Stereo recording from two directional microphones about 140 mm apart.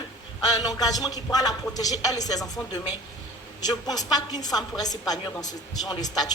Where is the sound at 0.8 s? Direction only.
25° left (ahead or behind).